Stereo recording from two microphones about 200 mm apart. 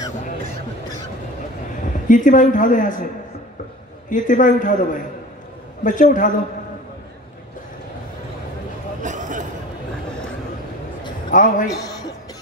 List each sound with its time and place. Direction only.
2.0 s a man's voice: 40° left (ahead or behind)
4.1 s a man's voice: 40° left (ahead or behind)
9.0 s a sound: 40° right (ahead or behind)
11.2 s a man's voice: 40° left (ahead or behind)